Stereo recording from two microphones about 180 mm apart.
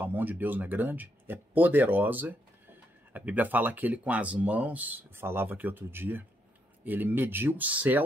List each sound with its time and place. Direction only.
0.0 s speech: 10° right (ahead or behind)